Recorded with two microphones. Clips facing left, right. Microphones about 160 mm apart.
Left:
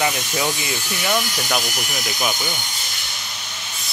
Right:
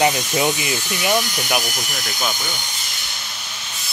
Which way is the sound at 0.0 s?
20° right (ahead or behind).